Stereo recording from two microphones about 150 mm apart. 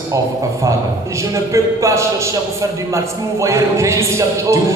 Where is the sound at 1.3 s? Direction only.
20° right (ahead or behind).